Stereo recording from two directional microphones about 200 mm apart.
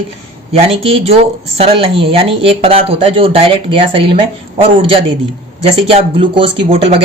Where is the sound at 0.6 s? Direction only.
30° right (ahead or behind).